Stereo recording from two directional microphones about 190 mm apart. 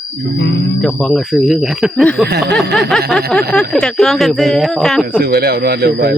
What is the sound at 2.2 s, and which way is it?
Speech, 60° right (ahead or behind).